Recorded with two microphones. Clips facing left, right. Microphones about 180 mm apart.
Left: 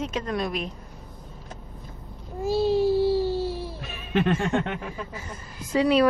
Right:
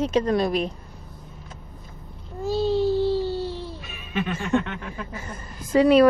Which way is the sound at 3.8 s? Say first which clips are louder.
Left 3 dB; 40° left (ahead or behind).